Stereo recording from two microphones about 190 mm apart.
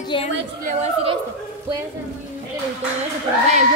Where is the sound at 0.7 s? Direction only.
35° right (ahead or behind).